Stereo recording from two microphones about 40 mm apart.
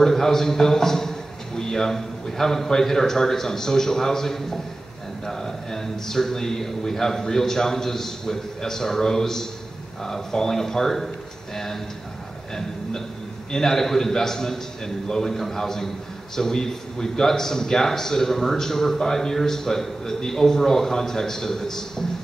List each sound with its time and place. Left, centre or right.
0.0 s a man's voice: centre
11.5 s a sound: centre
13.5 s a man's voice: centre